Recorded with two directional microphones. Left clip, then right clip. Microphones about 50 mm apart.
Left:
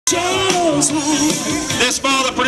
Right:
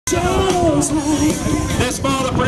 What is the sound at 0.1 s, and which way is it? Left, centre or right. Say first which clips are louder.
Speech: even; left.